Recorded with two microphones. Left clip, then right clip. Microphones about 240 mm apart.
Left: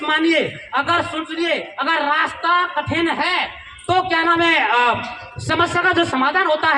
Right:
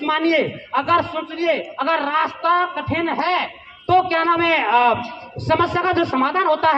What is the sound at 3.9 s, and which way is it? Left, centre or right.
A man's voice, left.